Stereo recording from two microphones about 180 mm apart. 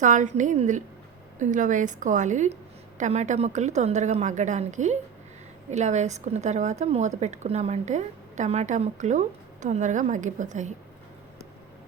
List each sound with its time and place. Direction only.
0.0 s a woman's voice: 45° right (ahead or behind)